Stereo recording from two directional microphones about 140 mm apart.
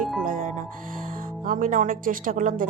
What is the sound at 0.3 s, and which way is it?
Music, 70° right (ahead or behind).